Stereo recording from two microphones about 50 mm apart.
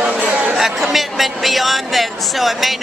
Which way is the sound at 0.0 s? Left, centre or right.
Right.